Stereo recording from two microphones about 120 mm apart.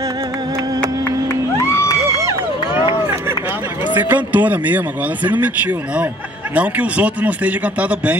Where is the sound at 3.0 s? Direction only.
20° right (ahead or behind).